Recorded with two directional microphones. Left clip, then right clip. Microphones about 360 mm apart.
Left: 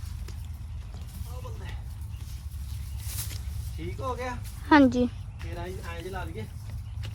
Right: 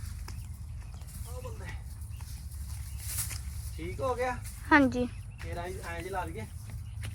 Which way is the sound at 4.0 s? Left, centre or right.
Centre.